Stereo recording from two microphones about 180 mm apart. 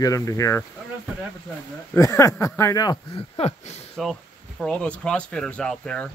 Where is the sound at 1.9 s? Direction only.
15° left (ahead or behind); by 3.8 s 35° left (ahead or behind).